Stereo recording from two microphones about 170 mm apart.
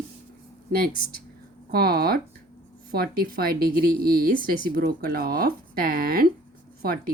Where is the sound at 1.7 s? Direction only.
65° right (ahead or behind).